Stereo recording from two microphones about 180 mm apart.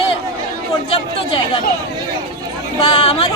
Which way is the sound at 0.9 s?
30° left (ahead or behind).